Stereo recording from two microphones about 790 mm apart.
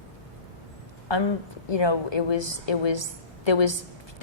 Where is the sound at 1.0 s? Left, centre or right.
Left.